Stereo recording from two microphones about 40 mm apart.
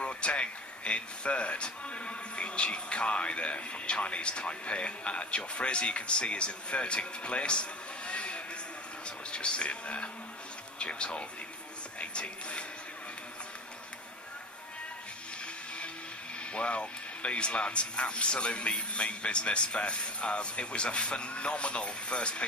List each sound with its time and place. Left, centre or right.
0.0 s speech: left
16.5 s speech: left